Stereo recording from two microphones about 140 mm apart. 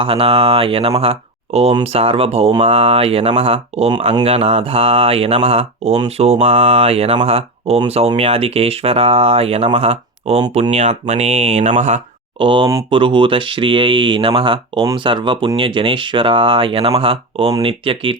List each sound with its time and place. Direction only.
0.0 s speech: 40° right (ahead or behind); by 12.0 s 55° right (ahead or behind)
12.4 s speech: 35° right (ahead or behind)